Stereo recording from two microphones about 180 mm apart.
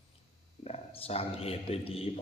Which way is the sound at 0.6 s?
35° left (ahead or behind).